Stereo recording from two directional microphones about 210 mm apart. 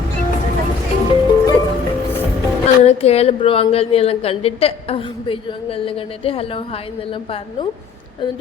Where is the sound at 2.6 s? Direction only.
30° left (ahead or behind).